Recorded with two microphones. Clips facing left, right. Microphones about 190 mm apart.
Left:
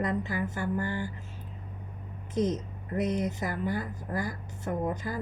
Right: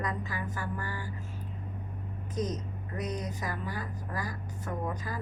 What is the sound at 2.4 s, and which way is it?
A woman's voice, 25° left (ahead or behind).